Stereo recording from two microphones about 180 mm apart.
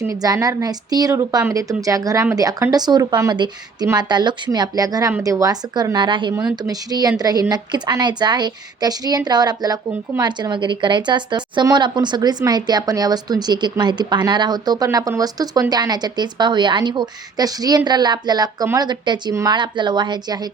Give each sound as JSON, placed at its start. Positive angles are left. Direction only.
{"t": 0.0, "sound": "a woman's voice", "side_deg": -20}